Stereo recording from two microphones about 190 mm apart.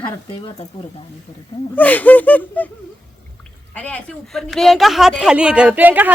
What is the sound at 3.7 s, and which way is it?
A woman's voice, 5° left (ahead or behind).